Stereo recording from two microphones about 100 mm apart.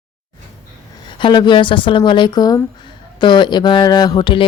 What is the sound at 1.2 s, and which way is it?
Speech, 50° left (ahead or behind).